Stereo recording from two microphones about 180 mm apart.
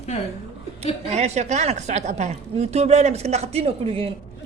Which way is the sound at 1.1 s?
35° right (ahead or behind).